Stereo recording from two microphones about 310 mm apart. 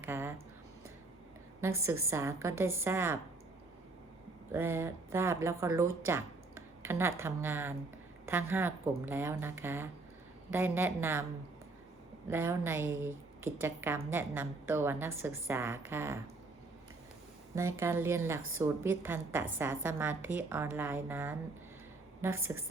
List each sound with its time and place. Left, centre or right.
0.0 s a sound: centre
2.0 s a woman's voice: centre
4.5 s a woman's voice: centre
12.3 s a woman's voice: centre
17.5 s a woman's voice: centre
22.3 s a woman's voice: right